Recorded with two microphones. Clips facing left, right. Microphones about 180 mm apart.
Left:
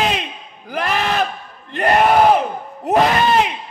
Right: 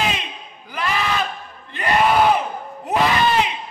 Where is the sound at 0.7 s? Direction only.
50° left (ahead or behind).